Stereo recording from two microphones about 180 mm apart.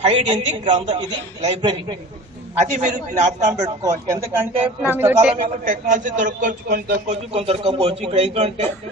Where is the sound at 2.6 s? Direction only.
40° right (ahead or behind).